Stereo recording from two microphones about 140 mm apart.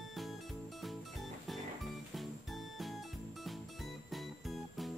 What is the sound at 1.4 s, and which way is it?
Music, centre (ahead or behind).